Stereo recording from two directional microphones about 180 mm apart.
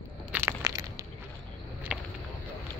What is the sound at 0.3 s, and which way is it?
Crushing, 15° right (ahead or behind).